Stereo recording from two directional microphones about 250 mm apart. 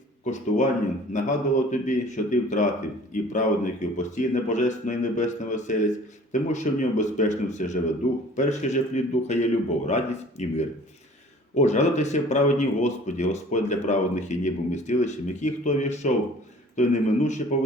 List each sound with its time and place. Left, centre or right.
0.3 s speech: left